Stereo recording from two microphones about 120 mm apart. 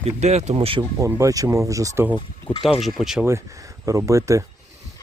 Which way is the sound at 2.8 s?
Centre (ahead or behind).